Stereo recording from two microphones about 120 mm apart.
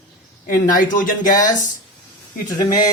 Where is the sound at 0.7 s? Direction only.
90° left.